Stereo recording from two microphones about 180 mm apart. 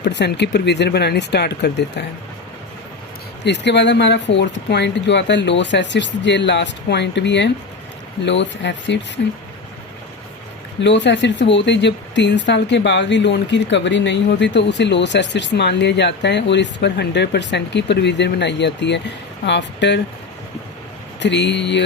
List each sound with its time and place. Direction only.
0.0 s speech: 75° left (ahead or behind)
3.4 s speech: 75° left (ahead or behind)
10.8 s speech: 80° left
21.2 s speech: 75° left (ahead or behind)